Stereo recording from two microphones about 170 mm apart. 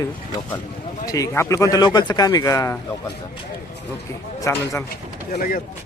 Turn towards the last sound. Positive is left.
turn(degrees=55)  # may be behind; listen again after turning